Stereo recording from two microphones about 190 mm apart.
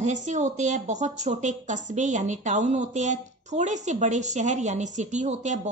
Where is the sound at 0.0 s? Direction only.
40° right (ahead or behind).